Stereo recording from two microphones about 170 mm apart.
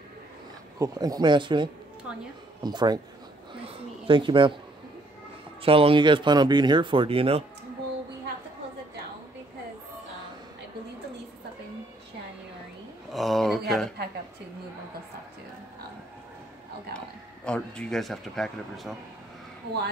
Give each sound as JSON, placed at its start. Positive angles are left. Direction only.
{"t": 0.7, "sound": "speech", "side_deg": -20}
{"t": 5.6, "sound": "speech", "side_deg": -35}
{"t": 13.1, "sound": "a sound", "side_deg": 0}
{"t": 17.5, "sound": "speech", "side_deg": 5}